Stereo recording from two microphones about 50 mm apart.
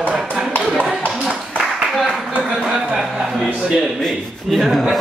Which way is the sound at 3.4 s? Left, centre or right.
Centre.